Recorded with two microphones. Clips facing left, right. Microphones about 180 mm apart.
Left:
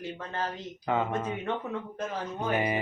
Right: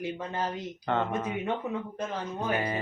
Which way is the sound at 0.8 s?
5° left (ahead or behind).